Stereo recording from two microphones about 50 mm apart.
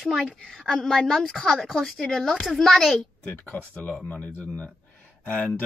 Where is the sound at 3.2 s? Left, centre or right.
Left.